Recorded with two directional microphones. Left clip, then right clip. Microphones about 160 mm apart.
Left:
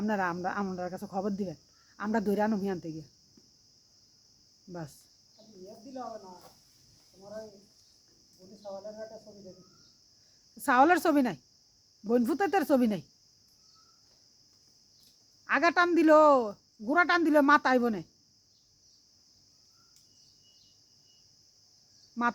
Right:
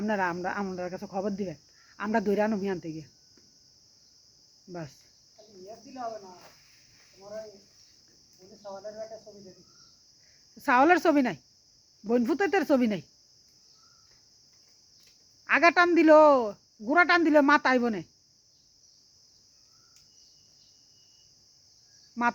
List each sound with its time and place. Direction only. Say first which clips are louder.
0.0 s speech: right 2 dB; 5° right (ahead or behind)
4.7 s speech: right 2 dB; 5° right (ahead or behind)
10.6 s speech: right 2 dB; 5° right (ahead or behind)
15.4 s speech: right 4 dB; 10° right (ahead or behind)